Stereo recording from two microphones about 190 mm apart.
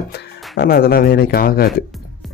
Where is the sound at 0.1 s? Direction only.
55° left (ahead or behind).